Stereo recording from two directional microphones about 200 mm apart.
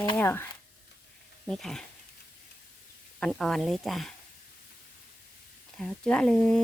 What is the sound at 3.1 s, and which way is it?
Speech, 5° left (ahead or behind).